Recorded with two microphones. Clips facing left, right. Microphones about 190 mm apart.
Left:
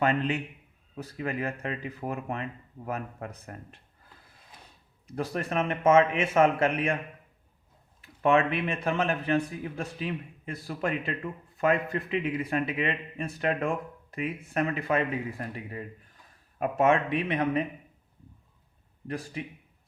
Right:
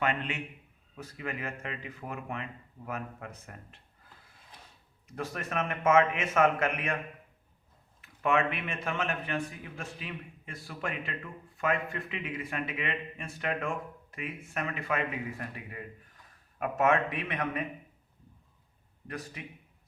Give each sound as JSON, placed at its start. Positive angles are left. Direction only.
{"t": 0.0, "sound": "speech", "side_deg": 35}
{"t": 5.0, "sound": "speech", "side_deg": 35}
{"t": 8.0, "sound": "speech", "side_deg": 30}
{"t": 16.6, "sound": "speech", "side_deg": 25}
{"t": 19.0, "sound": "speech", "side_deg": 30}